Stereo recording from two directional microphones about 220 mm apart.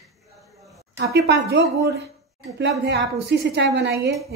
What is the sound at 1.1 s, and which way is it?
Speech, 50° right (ahead or behind).